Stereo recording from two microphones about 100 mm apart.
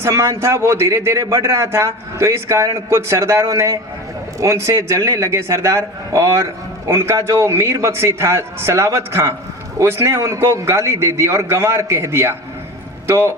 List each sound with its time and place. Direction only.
0.0 s a man's voice: 30° right (ahead or behind)